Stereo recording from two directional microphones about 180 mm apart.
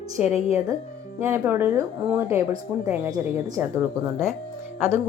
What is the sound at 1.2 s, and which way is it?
Speech, 15° right (ahead or behind).